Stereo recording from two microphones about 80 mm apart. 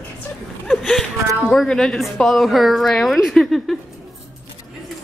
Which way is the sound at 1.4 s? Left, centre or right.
Centre.